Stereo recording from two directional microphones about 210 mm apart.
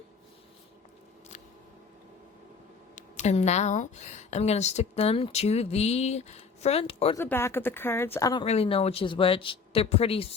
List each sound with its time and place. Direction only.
2.9 s speech: 35° left (ahead or behind)
7.2 s speech: 10° left (ahead or behind); by 10.2 s 25° left (ahead or behind)